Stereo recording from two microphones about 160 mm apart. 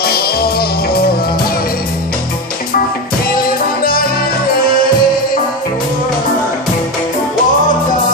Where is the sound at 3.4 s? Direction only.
65° left (ahead or behind).